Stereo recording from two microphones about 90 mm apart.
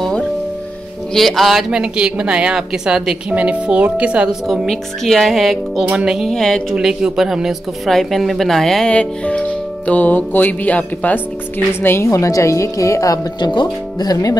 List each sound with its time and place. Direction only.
1.1 s a woman's voice: centre (ahead or behind)
4.5 s speech: centre (ahead or behind)
6.7 s speech: 5° right (ahead or behind); by 13.2 s 35° left (ahead or behind)
13.4 s speech: 55° left (ahead or behind)